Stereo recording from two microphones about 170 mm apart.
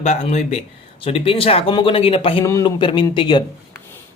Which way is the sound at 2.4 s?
20° left (ahead or behind).